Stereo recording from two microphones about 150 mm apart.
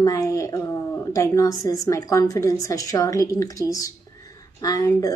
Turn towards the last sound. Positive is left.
turn(degrees=25)  # may be behind; listen again after turning